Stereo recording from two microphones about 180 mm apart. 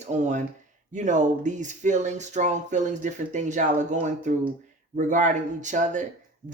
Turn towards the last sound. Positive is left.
turn(degrees=-45)  # may be behind; listen again after turning